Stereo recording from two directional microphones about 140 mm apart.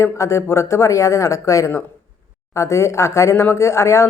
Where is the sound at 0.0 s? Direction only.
20° left (ahead or behind).